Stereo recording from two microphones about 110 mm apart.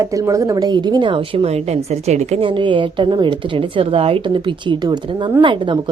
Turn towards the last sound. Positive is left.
turn(degrees=-45)  # may be behind; listen again after turning